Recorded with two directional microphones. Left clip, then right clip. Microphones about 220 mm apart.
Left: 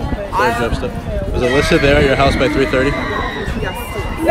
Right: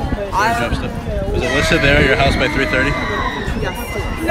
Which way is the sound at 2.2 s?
20° left (ahead or behind).